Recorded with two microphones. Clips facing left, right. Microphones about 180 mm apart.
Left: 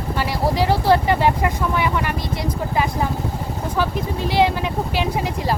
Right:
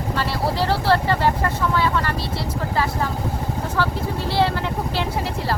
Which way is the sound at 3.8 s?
15° left (ahead or behind).